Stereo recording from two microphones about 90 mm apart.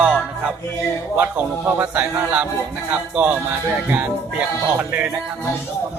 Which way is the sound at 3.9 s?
20° right (ahead or behind).